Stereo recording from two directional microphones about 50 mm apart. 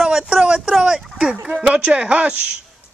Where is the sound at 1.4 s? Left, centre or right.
Right.